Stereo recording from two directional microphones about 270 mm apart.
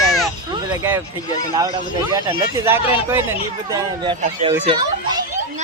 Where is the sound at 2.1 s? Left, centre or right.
Centre.